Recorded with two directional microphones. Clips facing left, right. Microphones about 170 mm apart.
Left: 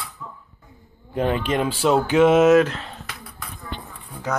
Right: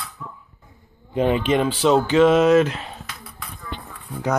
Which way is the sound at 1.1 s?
10° right (ahead or behind).